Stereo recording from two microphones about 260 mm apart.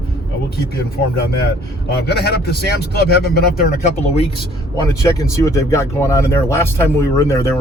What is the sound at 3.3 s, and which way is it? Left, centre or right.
Speech, left.